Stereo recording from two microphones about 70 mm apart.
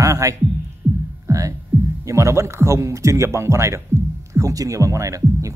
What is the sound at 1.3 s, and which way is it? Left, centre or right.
Hum, right.